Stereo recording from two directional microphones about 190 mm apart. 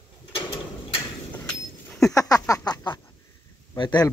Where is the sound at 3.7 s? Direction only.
20° left (ahead or behind).